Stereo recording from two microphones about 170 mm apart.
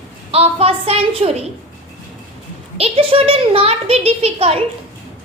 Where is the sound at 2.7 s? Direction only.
35° right (ahead or behind).